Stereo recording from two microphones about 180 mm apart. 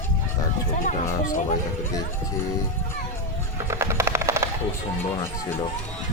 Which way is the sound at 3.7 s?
15° right (ahead or behind).